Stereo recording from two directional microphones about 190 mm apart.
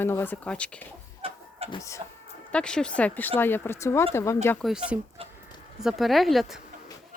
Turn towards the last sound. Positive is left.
turn(degrees=0)  # may be behind; listen again after turning